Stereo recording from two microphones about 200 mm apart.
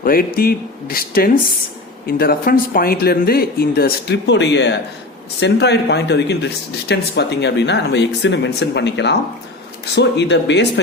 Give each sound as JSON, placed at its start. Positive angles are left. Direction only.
{"t": 0.0, "sound": "speech", "side_deg": 50}